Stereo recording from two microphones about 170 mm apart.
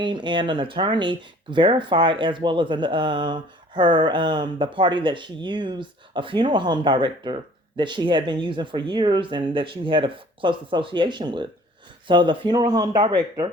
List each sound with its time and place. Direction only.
0.0 s speech: 25° right (ahead or behind)